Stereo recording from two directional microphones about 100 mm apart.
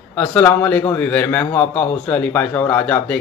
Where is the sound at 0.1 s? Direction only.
10° left (ahead or behind).